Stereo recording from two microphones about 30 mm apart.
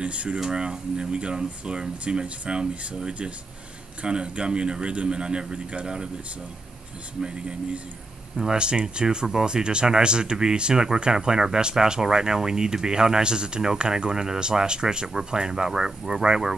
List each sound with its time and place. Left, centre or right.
0.0 s speech: right
0.5 s speech: right
1.4 s speech: right
2.7 s speech: right
4.0 s speech: right
7.2 s speech: right
8.5 s speech: right